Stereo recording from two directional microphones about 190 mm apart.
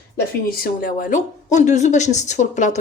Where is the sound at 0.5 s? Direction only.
45° left (ahead or behind).